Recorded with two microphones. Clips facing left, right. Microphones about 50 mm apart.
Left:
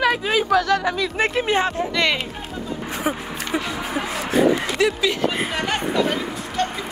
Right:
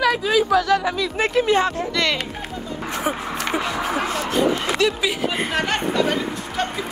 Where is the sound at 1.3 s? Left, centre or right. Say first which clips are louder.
Right 2 dB; left.